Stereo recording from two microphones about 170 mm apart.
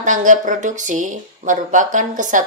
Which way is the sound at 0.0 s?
50° right (ahead or behind).